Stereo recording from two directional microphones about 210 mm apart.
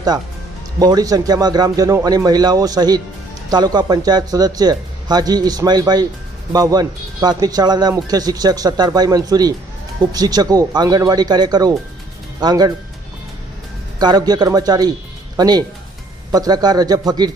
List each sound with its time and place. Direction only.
0.8 s speech: 20° right (ahead or behind)
14.0 s speech: 20° right (ahead or behind)